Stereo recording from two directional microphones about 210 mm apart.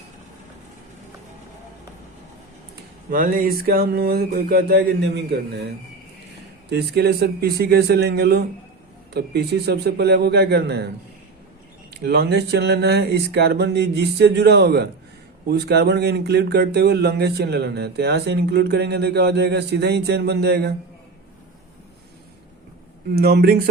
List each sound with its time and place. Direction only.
3.1 s speech: 40° right (ahead or behind)
12.0 s speech: 50° right (ahead or behind)
23.1 s speech: 50° right (ahead or behind)